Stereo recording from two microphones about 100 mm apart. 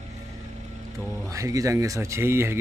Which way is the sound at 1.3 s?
35° right (ahead or behind).